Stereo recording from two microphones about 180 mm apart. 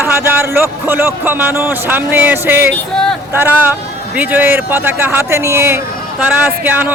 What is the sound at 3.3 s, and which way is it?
A man's voice, 10° right (ahead or behind).